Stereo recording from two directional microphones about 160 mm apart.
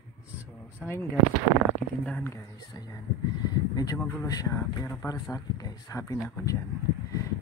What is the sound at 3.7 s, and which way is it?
Speech, 20° left (ahead or behind).